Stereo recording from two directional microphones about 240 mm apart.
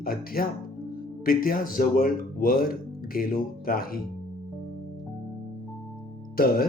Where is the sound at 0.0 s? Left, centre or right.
Left.